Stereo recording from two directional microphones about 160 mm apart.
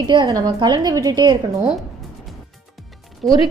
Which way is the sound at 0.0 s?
25° right (ahead or behind).